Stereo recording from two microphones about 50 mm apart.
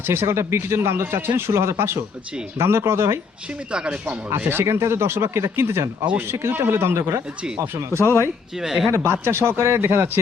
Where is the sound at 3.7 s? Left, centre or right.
Centre.